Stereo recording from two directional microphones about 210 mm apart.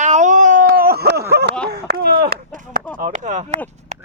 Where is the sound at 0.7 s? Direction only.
50° right (ahead or behind).